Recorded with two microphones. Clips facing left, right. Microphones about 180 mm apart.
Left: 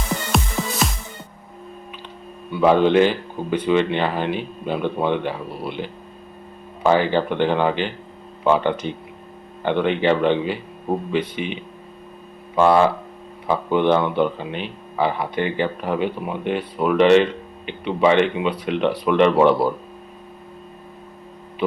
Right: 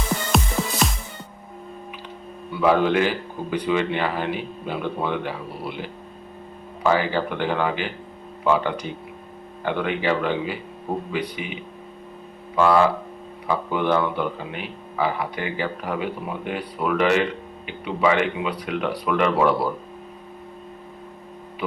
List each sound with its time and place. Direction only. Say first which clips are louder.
0.3 s music: even; centre (ahead or behind)
2.6 s speech: left 4 dB; 25° left (ahead or behind)
6.8 s speech: left 4 dB; 25° left (ahead or behind)
12.5 s speech: left 2 dB; 25° left (ahead or behind)